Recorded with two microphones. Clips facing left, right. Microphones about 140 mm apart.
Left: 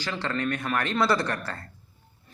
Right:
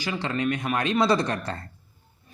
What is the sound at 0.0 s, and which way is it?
Speech, 15° right (ahead or behind).